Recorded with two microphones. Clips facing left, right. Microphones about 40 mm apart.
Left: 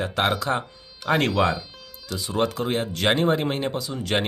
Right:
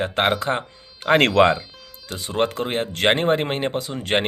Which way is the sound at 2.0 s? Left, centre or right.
Right.